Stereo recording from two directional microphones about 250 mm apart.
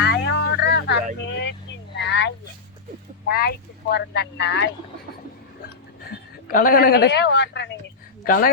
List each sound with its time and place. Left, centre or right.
0.0 s music: left
1.2 s vehicle: left
3.2 s a man's voice: left